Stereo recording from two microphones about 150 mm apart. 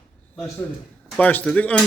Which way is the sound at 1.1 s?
10° left (ahead or behind).